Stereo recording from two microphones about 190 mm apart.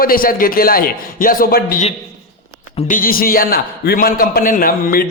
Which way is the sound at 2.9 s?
50° left (ahead or behind).